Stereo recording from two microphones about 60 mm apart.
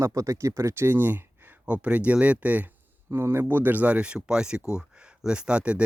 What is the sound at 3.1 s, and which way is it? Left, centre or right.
Speech, right.